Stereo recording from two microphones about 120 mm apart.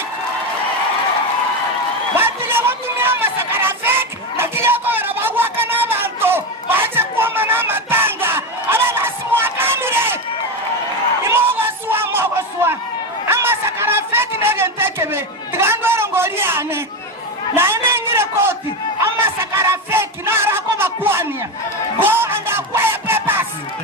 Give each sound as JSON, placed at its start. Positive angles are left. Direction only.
{"t": 2.1, "sound": "a sound", "side_deg": -20}
{"t": 11.3, "sound": "a sound", "side_deg": -20}
{"t": 13.2, "sound": "chatter", "side_deg": -20}
{"t": 17.5, "sound": "a man's voice", "side_deg": -20}
{"t": 19.0, "sound": "battle cry", "side_deg": -20}
{"t": 21.9, "sound": "music", "side_deg": -20}